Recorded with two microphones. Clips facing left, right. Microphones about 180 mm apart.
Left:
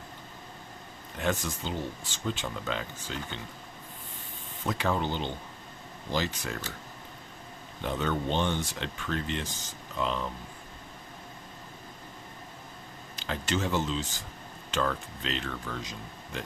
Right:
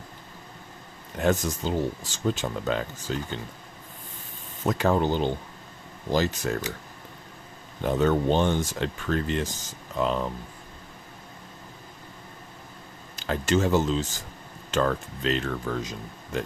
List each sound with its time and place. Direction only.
1.2 s speech: 40° right (ahead or behind)
4.6 s speech: 45° right (ahead or behind)
7.8 s speech: 45° right (ahead or behind)
13.1 s speech: 45° right (ahead or behind)